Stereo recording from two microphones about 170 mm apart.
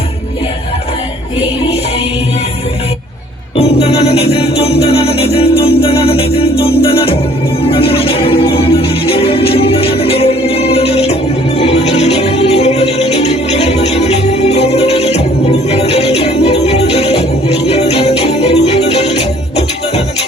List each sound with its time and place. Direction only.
3.6 s music: 35° left (ahead or behind)